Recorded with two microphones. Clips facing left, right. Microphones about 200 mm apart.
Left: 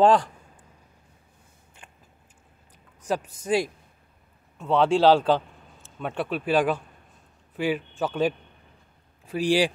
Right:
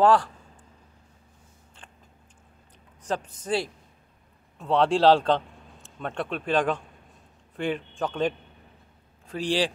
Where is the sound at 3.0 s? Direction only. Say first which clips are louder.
Left 2 dB; 10° left (ahead or behind).